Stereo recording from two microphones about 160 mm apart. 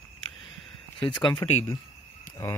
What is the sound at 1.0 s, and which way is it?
Speech, 30° left (ahead or behind).